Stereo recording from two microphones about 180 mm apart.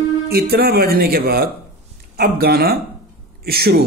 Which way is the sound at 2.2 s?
60° right (ahead or behind).